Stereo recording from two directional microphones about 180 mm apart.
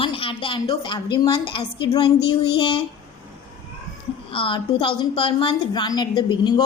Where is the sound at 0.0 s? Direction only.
30° left (ahead or behind).